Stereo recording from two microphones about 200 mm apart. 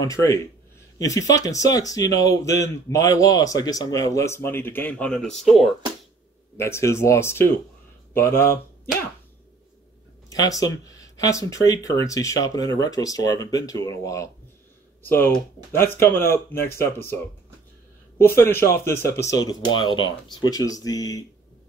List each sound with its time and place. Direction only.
0.0 s speech: 15° left (ahead or behind)
6.5 s speech: 15° left (ahead or behind)
10.3 s speech: 20° left (ahead or behind)
18.4 s speech: 10° left (ahead or behind)